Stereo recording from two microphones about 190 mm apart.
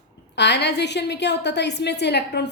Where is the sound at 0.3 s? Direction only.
65° left (ahead or behind).